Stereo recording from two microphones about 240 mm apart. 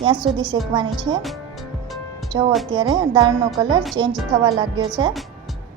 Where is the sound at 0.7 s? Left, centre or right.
Centre.